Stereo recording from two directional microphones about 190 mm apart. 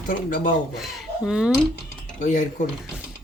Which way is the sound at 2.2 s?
45° left (ahead or behind).